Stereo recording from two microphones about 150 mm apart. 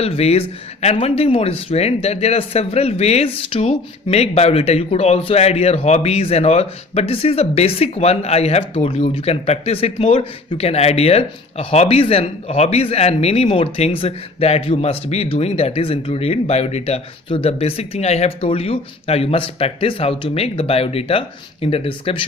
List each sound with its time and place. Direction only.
0.0 s speech: 45° left (ahead or behind)